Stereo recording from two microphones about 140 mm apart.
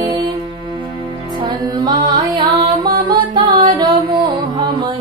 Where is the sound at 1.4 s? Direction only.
25° right (ahead or behind).